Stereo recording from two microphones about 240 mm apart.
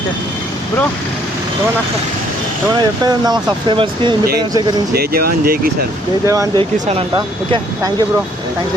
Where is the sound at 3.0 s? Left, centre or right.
Centre.